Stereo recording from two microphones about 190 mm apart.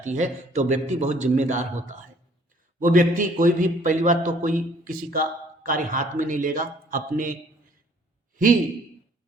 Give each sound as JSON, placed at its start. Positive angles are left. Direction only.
{"t": 0.0, "sound": "a man's voice", "side_deg": -40}